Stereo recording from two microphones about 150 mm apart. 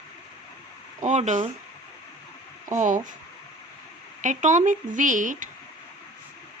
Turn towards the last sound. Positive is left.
turn(degrees=-60)  # may be behind; listen again after turning